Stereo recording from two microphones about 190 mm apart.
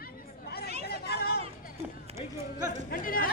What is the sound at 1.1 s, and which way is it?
Chatter, 55° left (ahead or behind).